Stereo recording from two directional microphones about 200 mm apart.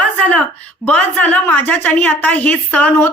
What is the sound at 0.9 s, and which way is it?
A woman's voice, 5° left (ahead or behind).